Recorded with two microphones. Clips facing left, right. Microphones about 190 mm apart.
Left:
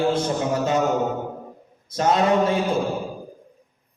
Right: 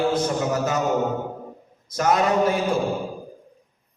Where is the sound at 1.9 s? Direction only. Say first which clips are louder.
Left 1 dB; 25° left (ahead or behind).